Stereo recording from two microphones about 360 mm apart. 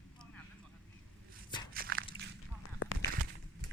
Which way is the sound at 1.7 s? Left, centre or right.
Right.